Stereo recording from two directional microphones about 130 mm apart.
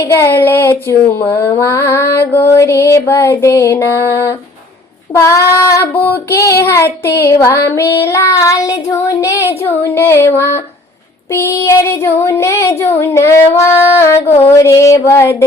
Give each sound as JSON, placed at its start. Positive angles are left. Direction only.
{"t": 0.0, "sound": "child singing", "side_deg": 20}